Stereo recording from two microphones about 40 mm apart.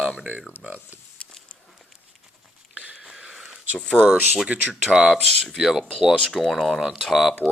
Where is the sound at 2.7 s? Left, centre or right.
Right.